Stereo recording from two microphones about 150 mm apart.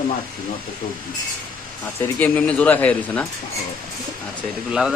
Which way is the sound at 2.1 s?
10° left (ahead or behind).